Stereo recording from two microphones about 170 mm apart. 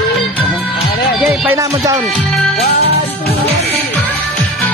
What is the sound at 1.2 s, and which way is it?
Music, centre (ahead or behind).